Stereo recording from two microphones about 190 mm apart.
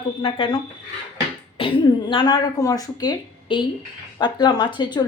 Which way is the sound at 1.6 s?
25° left (ahead or behind).